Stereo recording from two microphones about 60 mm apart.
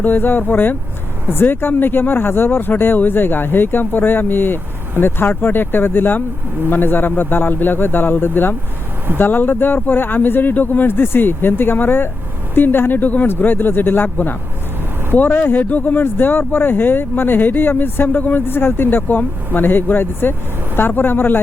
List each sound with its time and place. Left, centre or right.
0.0 s speech: left